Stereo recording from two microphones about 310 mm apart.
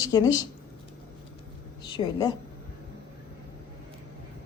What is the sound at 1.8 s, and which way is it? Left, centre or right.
Speech, centre.